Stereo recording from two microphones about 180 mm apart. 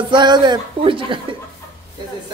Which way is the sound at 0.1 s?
25° right (ahead or behind).